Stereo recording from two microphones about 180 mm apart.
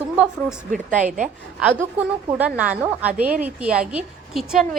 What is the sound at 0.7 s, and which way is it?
Speech, 45° right (ahead or behind).